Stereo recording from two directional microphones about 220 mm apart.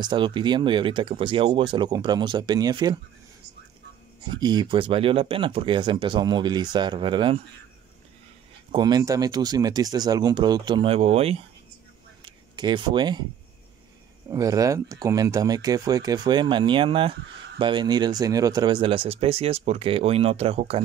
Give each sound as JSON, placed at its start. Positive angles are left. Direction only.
{"t": 0.0, "sound": "speech", "side_deg": -20}
{"t": 4.3, "sound": "speech", "side_deg": -20}
{"t": 8.7, "sound": "speech", "side_deg": -20}
{"t": 12.2, "sound": "a sound", "side_deg": -20}
{"t": 14.3, "sound": "speech", "side_deg": -15}